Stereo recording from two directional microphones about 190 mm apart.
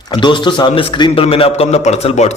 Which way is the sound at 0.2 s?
25° left (ahead or behind).